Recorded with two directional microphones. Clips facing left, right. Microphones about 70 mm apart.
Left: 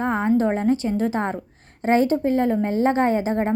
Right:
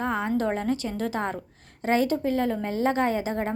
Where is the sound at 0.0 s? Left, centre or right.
Left.